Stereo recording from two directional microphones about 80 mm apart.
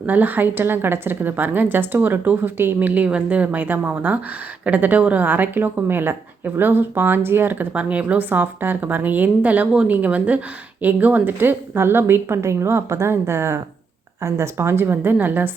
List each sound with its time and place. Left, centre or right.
0.0 s a woman's voice: right